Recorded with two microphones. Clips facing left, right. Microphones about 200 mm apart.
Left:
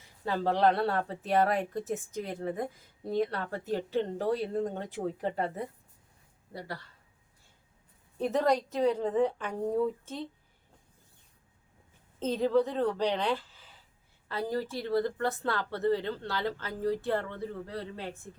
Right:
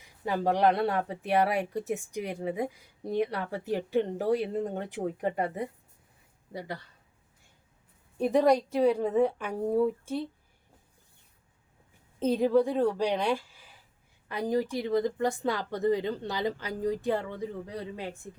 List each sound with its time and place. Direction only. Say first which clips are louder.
0.0 s speech: right 2 dB; 15° right (ahead or behind)
8.2 s speech: right 4 dB; 10° right (ahead or behind)
12.2 s speech: right 3 dB; 10° right (ahead or behind)